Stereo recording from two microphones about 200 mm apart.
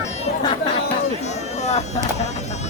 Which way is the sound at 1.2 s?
35° left (ahead or behind).